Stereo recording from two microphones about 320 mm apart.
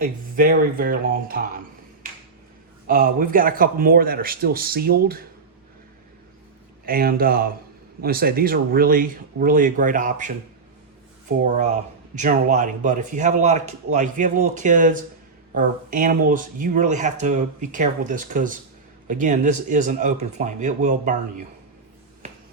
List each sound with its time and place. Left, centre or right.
0.0 s speech: right
2.8 s speech: right
6.8 s speech: right